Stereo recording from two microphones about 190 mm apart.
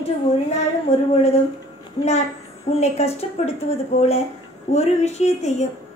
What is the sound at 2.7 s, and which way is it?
A woman's voice, 35° left (ahead or behind).